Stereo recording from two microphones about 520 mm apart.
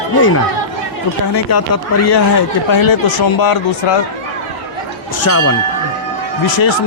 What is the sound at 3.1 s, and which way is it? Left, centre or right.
Speech, left.